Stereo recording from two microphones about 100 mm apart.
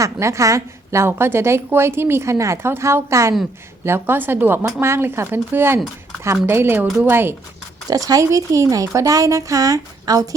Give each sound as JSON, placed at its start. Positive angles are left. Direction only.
{"t": 0.0, "sound": "a woman's voice", "side_deg": -30}
{"t": 7.9, "sound": "speech", "side_deg": -35}